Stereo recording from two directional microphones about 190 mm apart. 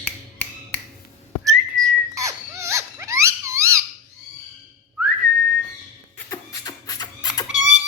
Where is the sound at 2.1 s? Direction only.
15° right (ahead or behind).